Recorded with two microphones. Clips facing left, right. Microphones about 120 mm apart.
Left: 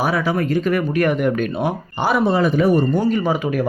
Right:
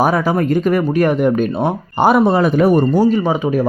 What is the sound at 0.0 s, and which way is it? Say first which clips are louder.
Speech: right 5 dB; 45° right (ahead or behind).